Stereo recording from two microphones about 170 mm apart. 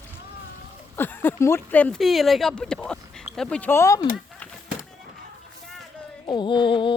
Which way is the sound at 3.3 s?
5° left (ahead or behind).